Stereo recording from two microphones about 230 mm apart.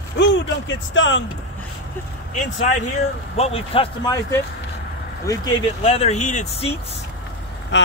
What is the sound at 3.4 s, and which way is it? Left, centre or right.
Speech, left.